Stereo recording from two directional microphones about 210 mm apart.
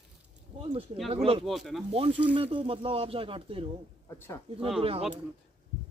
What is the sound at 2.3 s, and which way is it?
Speech, 25° right (ahead or behind).